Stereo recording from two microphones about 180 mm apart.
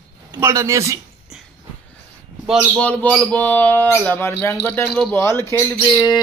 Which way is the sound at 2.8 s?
5° left (ahead or behind).